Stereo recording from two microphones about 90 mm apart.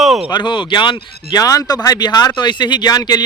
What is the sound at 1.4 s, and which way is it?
Speech, 40° left (ahead or behind).